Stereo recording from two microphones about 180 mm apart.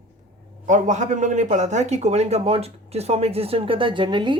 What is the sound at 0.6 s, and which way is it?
A man's voice, 45° right (ahead or behind).